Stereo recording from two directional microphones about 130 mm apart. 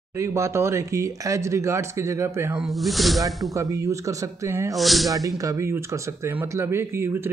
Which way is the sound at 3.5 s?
25° right (ahead or behind).